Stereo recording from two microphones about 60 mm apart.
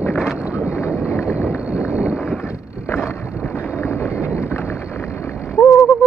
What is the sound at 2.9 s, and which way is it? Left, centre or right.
Boat, left.